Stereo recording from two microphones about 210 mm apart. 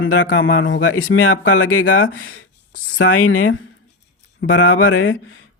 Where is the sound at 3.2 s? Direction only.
70° left (ahead or behind).